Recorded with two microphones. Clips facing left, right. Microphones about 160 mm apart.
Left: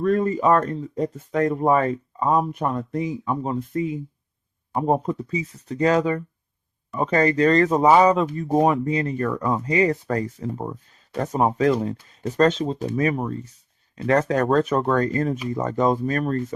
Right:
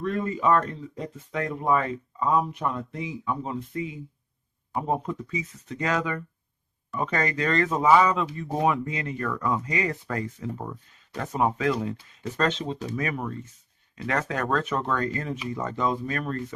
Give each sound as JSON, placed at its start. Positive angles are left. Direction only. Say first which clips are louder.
{"t": 0.0, "sound": "speech", "louder": "left 6 dB", "side_deg": 45}